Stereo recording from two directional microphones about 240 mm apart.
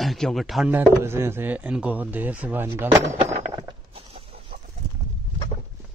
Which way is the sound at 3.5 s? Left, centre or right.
Right.